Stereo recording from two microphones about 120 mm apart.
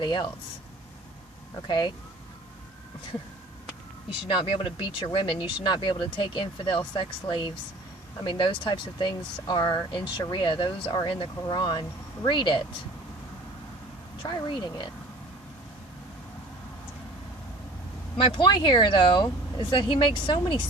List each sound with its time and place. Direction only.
0.0 s speech: 40° left (ahead or behind)
1.6 s speech: 40° left (ahead or behind)
4.3 s speech: 45° left (ahead or behind)
14.2 s speech: 40° left (ahead or behind)
18.2 s speech: 45° left (ahead or behind)